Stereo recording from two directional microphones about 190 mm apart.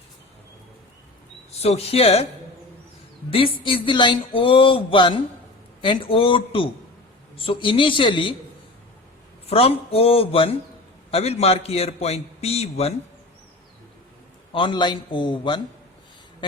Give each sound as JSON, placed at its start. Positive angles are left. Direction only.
{"t": 1.5, "sound": "a man's voice", "side_deg": 30}
{"t": 3.2, "sound": "speech", "side_deg": 30}
{"t": 9.5, "sound": "a man's voice", "side_deg": 30}
{"t": 14.5, "sound": "speech", "side_deg": 25}